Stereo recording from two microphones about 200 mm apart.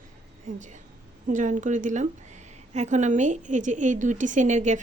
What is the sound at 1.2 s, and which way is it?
A woman's voice, 40° right (ahead or behind).